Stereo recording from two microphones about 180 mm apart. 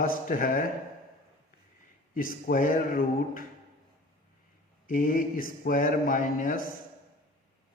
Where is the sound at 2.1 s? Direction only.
50° left (ahead or behind).